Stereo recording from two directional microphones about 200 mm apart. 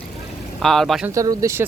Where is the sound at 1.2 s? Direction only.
15° right (ahead or behind).